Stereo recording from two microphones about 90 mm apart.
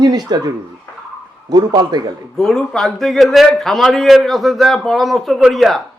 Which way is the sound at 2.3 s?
5° left (ahead or behind).